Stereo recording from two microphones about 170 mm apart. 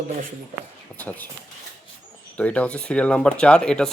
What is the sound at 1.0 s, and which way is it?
Speech, 10° left (ahead or behind).